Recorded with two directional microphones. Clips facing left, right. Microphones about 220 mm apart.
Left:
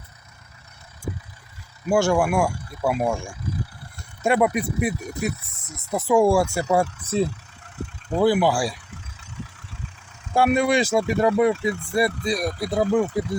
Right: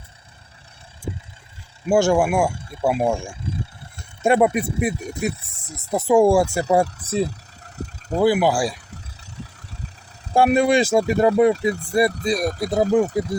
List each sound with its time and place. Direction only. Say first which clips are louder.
1.9 s speech: right 2 dB; 25° right (ahead or behind)
6.4 s speech: right 2 dB; 35° right (ahead or behind)
7.3 s vehicle: even; 40° right (ahead or behind)
8.2 s speech: right 1 dB; 10° right (ahead or behind)
9.4 s vehicle: even; 40° right (ahead or behind)
10.3 s speech: right 3 dB; 30° right (ahead or behind)